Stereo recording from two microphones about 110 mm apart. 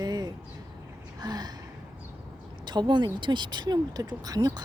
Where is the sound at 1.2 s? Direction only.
40° right (ahead or behind).